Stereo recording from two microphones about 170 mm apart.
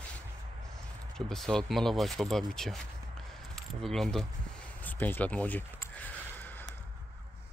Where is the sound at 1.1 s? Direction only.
5° left (ahead or behind).